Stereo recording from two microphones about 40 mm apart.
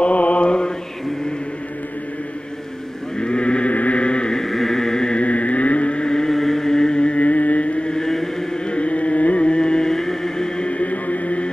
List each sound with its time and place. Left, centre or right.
0.0 s mantra: left
3.2 s sheep: left
3.7 s chant: left
4.4 s a sound: centre
5.1 s vehicle: left
7.9 s chant: centre
8.6 s music: left
10.7 s music: left